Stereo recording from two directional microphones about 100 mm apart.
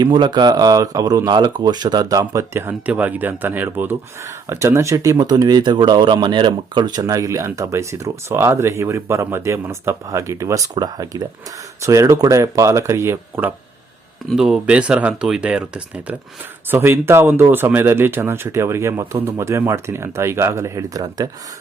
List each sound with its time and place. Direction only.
0.0 s speech: 50° right (ahead or behind); by 13.4 s 25° right (ahead or behind)
14.3 s speech: 5° right (ahead or behind)
16.6 s speech: 25° right (ahead or behind)